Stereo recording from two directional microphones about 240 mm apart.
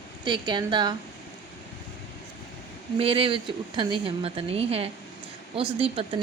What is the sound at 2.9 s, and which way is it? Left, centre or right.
Speech, right.